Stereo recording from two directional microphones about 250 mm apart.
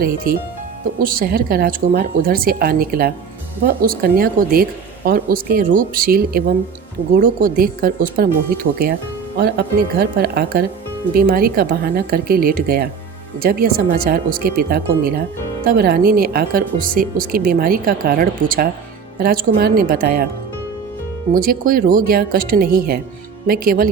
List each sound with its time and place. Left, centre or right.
0.3 s speech: right
21.3 s speech: right